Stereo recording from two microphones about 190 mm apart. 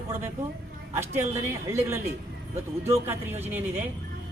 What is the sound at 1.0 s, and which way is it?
A man's voice, 15° right (ahead or behind).